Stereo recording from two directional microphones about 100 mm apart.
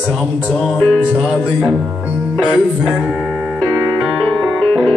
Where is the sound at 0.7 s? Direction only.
15° left (ahead or behind).